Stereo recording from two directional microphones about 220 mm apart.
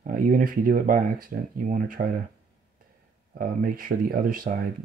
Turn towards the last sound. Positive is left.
turn(degrees=-40)  # may be behind; listen again after turning